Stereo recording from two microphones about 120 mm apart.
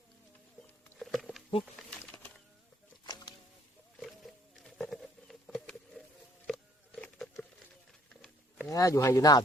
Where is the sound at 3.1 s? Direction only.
35° left (ahead or behind).